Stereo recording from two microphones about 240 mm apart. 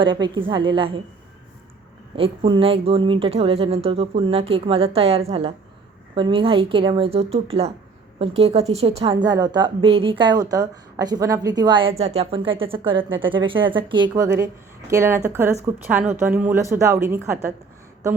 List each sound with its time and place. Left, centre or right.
0.0 s a woman's voice: centre
2.1 s a woman's voice: right